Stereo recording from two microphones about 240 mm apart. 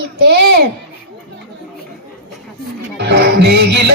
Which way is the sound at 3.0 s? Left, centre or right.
Right.